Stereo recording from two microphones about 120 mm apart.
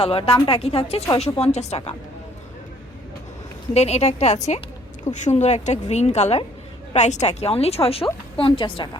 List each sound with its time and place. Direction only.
0.0 s a woman's voice: 50° left (ahead or behind)
3.8 s a woman's voice: 65° left (ahead or behind); by 9.0 s 45° left (ahead or behind)